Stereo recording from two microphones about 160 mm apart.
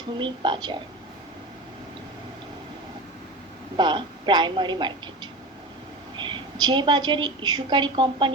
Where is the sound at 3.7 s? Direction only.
30° right (ahead or behind).